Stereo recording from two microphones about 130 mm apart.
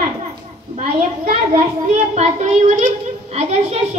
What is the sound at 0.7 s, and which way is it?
Speech, 85° right.